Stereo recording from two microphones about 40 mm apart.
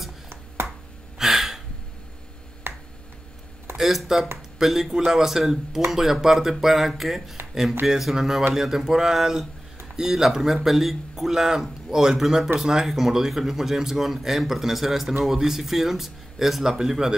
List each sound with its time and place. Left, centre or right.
1.1 s gasp: centre
2.6 s finger snapping: right
3.7 s speech: centre